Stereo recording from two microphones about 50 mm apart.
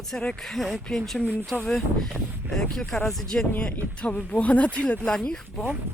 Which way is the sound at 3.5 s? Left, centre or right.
Left.